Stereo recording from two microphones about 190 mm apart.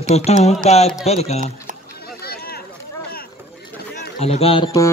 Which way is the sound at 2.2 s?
55° left (ahead or behind).